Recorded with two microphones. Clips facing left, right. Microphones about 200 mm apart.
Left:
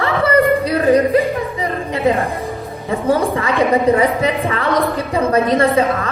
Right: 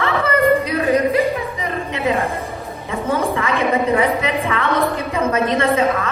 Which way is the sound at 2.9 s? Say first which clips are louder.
Left 4 dB; 35° left (ahead or behind).